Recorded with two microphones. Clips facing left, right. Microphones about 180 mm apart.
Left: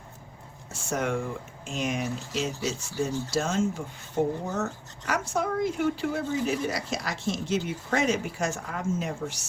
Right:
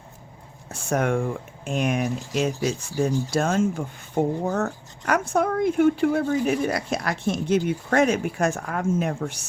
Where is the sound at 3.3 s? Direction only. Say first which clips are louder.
Right 3 dB; 55° right (ahead or behind).